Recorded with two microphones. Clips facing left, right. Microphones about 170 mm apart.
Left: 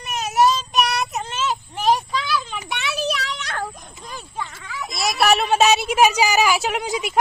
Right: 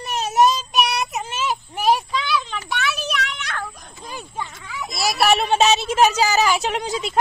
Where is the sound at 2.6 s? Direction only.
25° left (ahead or behind); by 3.6 s 40° left (ahead or behind).